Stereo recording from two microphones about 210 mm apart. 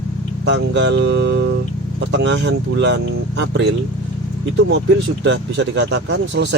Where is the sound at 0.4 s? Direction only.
55° right (ahead or behind).